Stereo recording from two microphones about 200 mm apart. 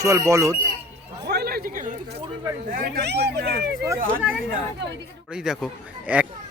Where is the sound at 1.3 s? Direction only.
50° right (ahead or behind).